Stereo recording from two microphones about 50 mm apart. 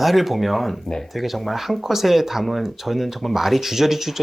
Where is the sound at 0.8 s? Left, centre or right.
Centre.